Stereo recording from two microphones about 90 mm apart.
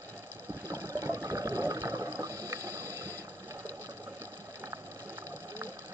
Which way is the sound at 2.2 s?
35° right (ahead or behind).